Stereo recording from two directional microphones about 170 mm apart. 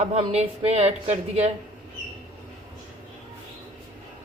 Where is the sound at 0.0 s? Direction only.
40° right (ahead or behind).